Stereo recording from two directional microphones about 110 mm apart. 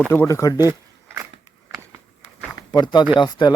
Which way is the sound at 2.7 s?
40° left (ahead or behind).